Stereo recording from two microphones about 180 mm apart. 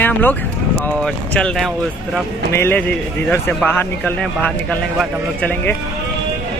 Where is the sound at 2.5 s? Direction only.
10° left (ahead or behind).